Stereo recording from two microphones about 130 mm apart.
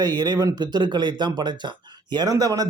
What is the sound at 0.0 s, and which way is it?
Speech, 35° right (ahead or behind).